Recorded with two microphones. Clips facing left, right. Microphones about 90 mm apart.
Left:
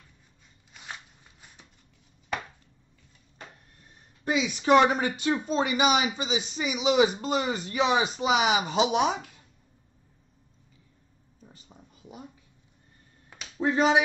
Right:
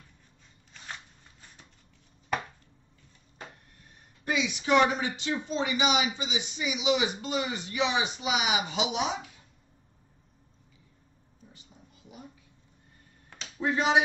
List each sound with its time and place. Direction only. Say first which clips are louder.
3.8 s speech: left 4 dB; 35° left (ahead or behind); by 9.3 s 50° left (ahead or behind)
13.6 s speech: left 3 dB; 35° left (ahead or behind)